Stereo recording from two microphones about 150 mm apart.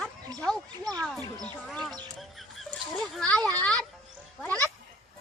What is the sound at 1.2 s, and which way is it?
Speech, 25° right (ahead or behind).